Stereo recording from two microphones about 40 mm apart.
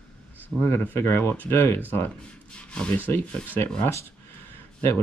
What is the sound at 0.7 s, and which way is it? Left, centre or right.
Speech, left.